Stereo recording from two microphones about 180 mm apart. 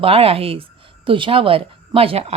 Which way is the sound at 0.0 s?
30° right (ahead or behind).